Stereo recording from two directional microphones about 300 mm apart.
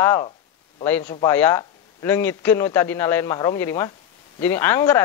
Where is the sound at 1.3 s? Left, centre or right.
Centre.